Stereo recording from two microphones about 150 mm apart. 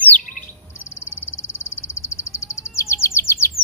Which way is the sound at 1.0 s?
15° left (ahead or behind).